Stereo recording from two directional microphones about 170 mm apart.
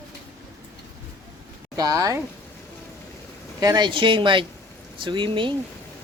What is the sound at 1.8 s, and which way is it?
Speech, 20° right (ahead or behind).